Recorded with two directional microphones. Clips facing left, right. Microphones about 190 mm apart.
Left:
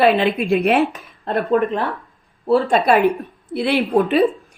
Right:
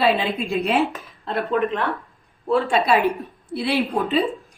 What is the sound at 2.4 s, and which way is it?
Speech, 35° left (ahead or behind).